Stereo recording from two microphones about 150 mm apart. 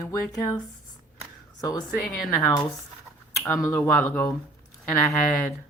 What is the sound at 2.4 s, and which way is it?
Speech, 25° left (ahead or behind).